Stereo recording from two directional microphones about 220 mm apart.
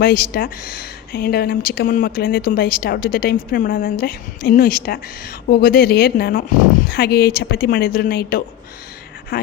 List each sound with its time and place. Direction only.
0.0 s speech: 45° left (ahead or behind)